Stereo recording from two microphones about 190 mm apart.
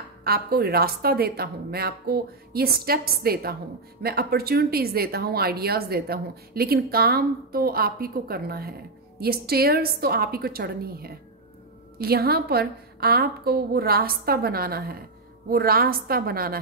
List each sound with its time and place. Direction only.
0.2 s a woman's voice: 55° right (ahead or behind)